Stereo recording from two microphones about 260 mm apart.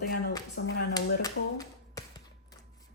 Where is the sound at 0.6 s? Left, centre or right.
Left.